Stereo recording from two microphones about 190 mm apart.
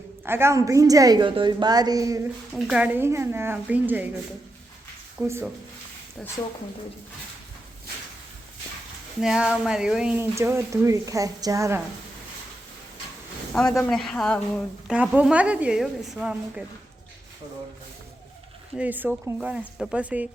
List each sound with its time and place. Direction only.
0.3 s a woman's voice: 15° right (ahead or behind)
2.6 s a woman's voice: 5° right (ahead or behind)
5.1 s a woman's voice: 10° right (ahead or behind)
9.2 s a woman's voice: 5° right (ahead or behind)
10.3 s a woman's voice: 15° right (ahead or behind)
13.7 s a woman's voice: centre (ahead or behind)
18.8 s a woman's voice: 10° right (ahead or behind)